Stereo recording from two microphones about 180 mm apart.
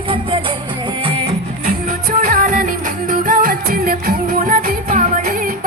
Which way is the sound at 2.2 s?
50° right (ahead or behind).